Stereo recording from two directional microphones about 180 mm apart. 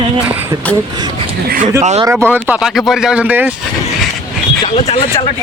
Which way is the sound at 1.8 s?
40° right (ahead or behind).